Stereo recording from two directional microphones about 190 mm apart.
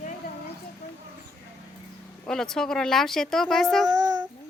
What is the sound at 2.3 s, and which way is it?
A woman's voice, 5° left (ahead or behind).